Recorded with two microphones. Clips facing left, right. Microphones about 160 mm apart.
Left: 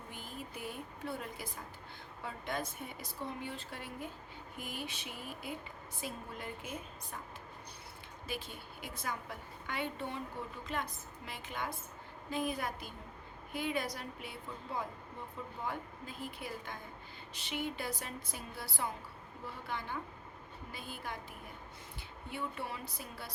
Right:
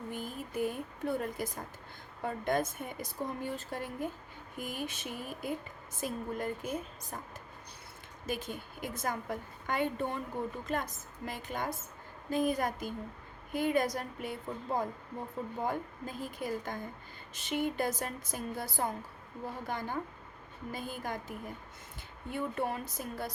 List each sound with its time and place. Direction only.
0.1 s a woman's voice: 45° right (ahead or behind)
8.3 s a woman's voice: 45° right (ahead or behind)